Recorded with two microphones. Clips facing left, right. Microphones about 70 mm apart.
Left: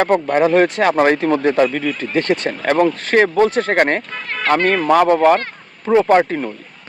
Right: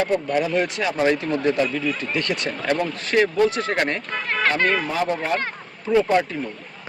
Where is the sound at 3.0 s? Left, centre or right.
Left.